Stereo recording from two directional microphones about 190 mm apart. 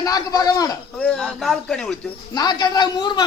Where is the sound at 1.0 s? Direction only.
Centre (ahead or behind).